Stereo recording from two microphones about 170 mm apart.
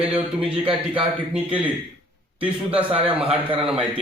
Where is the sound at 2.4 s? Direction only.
10° right (ahead or behind).